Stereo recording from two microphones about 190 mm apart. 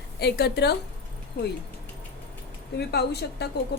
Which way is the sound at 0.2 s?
60° left (ahead or behind).